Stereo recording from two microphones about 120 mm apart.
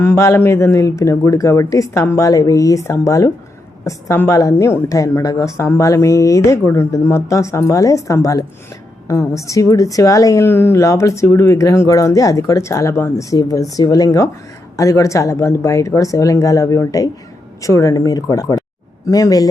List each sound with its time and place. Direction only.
0.0 s a woman's voice: 25° left (ahead or behind)